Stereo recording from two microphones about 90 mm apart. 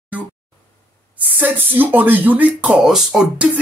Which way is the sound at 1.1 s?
20° right (ahead or behind).